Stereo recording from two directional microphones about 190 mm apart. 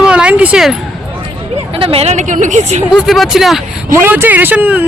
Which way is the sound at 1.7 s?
30° right (ahead or behind).